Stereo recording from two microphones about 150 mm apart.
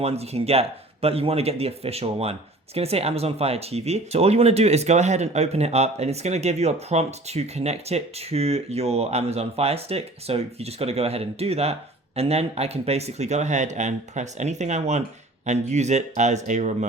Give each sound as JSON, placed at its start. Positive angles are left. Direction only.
{"t": 0.0, "sound": "speech", "side_deg": -45}